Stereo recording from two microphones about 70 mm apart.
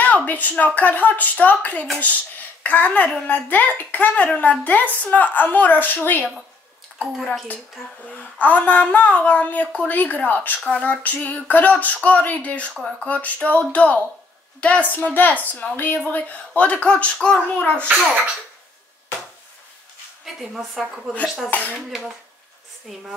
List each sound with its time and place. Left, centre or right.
0.0 s speech: left
7.0 s speech: centre
8.2 s speech: left
10.6 s speech: centre
20.3 s a woman's voice: centre
21.5 s speech: left
21.7 s a woman's voice: centre